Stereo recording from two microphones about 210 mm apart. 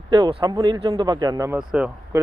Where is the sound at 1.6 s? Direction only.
5° right (ahead or behind).